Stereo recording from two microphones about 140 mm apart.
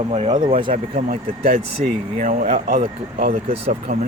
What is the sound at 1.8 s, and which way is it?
Speech, 65° right (ahead or behind).